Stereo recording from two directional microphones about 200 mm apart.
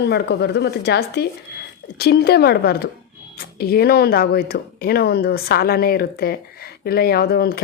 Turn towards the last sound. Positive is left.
turn(degrees=50)  # may be behind; listen again after turning